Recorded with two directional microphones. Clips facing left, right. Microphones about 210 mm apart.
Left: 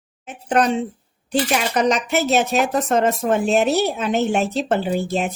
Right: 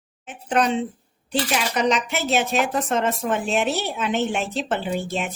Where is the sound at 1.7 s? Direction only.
45° left (ahead or behind).